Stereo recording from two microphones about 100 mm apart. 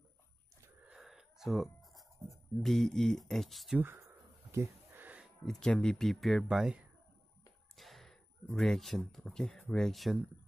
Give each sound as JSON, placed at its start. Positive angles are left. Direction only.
{"t": 0.8, "sound": "writing", "side_deg": -5}
{"t": 3.7, "sound": "speech", "side_deg": -25}
{"t": 4.5, "sound": "a sound", "side_deg": -25}
{"t": 5.4, "sound": "speech", "side_deg": 5}